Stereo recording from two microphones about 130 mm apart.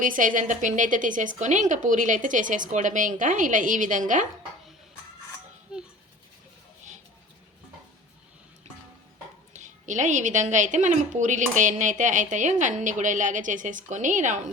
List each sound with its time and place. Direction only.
0.0 s a woman's voice: 90° right
9.5 s a woman's voice: 70° right (ahead or behind)